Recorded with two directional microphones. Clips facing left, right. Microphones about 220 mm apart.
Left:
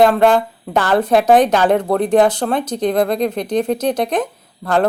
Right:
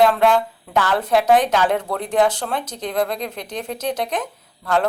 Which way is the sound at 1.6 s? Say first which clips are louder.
Left 6 dB; 60° left (ahead or behind).